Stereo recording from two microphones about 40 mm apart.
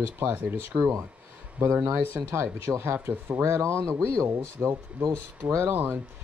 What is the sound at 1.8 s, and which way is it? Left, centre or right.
Speech, right.